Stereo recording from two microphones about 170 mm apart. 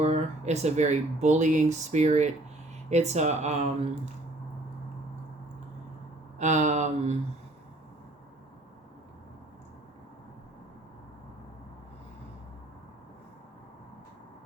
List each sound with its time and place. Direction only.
0.0 s speech: 40° right (ahead or behind)
6.4 s speech: 45° right (ahead or behind)